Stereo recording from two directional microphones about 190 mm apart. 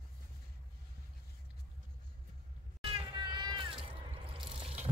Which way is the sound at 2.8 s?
30° right (ahead or behind).